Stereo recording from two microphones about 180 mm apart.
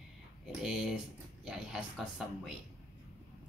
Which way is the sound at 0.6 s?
5° right (ahead or behind).